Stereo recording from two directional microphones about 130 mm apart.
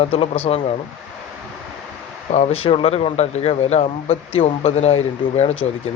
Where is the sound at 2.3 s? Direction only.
60° left (ahead or behind).